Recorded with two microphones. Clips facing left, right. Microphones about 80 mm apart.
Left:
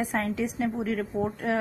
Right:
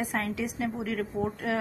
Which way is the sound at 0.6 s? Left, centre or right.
Left.